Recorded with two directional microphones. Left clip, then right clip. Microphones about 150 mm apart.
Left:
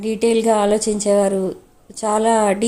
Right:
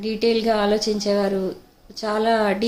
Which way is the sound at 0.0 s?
40° left (ahead or behind).